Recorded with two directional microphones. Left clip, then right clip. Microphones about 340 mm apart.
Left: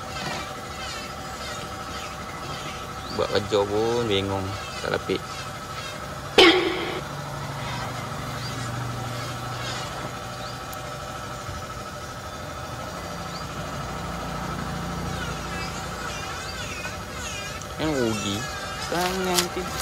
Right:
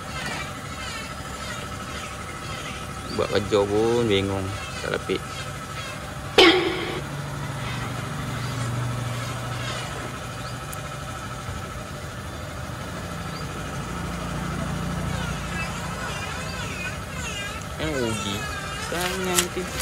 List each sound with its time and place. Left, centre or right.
3.2 s speech: centre
6.3 s a sound: centre
17.7 s vehicle: centre
18.9 s speech: centre